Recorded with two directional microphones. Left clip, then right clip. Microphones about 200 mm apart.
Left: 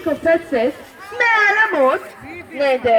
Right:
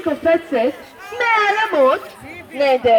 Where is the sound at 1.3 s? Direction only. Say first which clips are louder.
Even; 20° left (ahead or behind).